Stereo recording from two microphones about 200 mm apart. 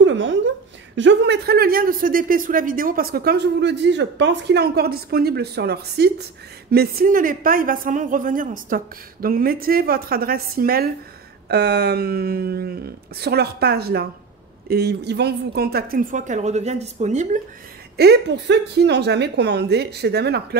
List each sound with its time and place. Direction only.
0.0 s a sound: 65° right (ahead or behind)
0.9 s a woman's voice: 65° right (ahead or behind); by 17.4 s 35° right (ahead or behind)
17.9 s a woman's voice: 55° right (ahead or behind)